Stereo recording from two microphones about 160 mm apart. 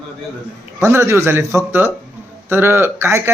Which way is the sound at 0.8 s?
15° right (ahead or behind).